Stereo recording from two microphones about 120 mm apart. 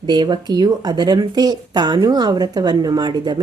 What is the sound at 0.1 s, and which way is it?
Speech, 35° right (ahead or behind).